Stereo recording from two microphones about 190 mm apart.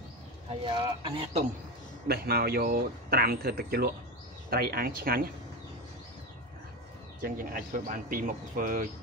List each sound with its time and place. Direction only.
0.5 s a man's voice: 25° right (ahead or behind)
2.0 s speech: 55° right (ahead or behind)
7.2 s speech: 50° right (ahead or behind)